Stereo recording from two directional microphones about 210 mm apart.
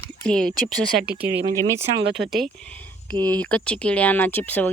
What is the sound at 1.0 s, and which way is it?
Speech, 50° right (ahead or behind).